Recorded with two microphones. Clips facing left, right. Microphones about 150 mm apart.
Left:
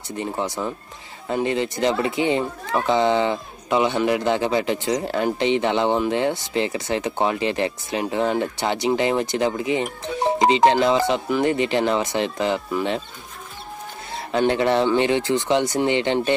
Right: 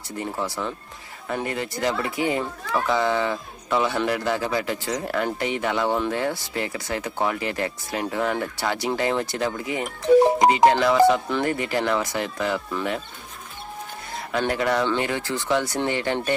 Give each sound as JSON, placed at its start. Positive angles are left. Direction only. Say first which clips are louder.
{"t": 0.2, "sound": "speech", "louder": "left 2 dB", "side_deg": 20}
{"t": 14.3, "sound": "speech", "louder": "left 4 dB", "side_deg": 25}